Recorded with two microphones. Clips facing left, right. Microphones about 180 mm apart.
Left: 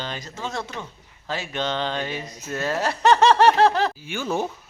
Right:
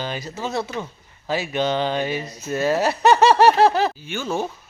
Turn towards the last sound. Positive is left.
turn(degrees=15)  # may be behind; listen again after turning